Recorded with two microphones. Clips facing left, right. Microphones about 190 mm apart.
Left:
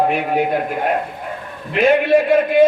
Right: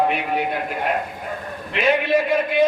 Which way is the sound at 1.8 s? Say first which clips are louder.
Left 5 dB; 45° left (ahead or behind).